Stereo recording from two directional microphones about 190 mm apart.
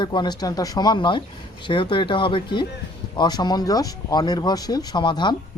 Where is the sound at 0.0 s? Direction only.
25° left (ahead or behind).